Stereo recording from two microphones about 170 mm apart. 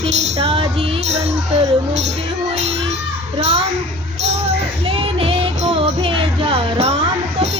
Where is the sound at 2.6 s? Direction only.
40° right (ahead or behind).